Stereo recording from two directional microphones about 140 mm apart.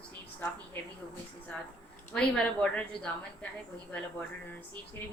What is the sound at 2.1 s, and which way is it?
Speech, 5° left (ahead or behind).